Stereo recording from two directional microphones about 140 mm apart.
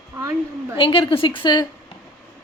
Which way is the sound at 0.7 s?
35° left (ahead or behind).